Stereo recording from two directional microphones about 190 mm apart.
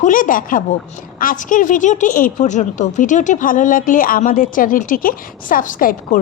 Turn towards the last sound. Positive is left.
turn(degrees=45)  # may be behind; listen again after turning